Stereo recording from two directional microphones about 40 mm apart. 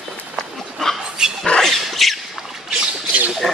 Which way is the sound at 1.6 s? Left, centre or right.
Centre.